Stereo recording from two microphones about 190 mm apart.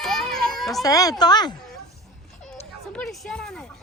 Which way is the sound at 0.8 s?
20° left (ahead or behind).